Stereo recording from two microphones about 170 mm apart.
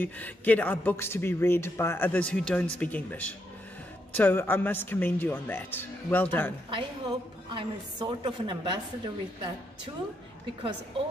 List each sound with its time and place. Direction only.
0.0 s a man's voice: 10° left (ahead or behind)
6.7 s a woman's voice: 25° right (ahead or behind)